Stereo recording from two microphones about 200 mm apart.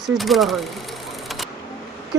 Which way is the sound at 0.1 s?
Centre (ahead or behind).